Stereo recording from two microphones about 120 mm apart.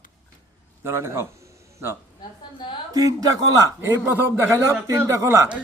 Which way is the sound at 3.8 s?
15° right (ahead or behind).